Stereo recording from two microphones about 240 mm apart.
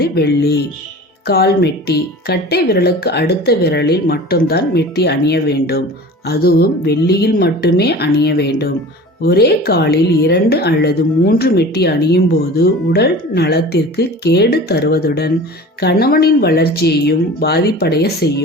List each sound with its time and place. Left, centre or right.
0.0 s a woman's voice: left